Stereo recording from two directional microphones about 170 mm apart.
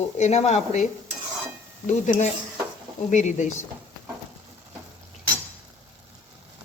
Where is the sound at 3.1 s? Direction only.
45° left (ahead or behind).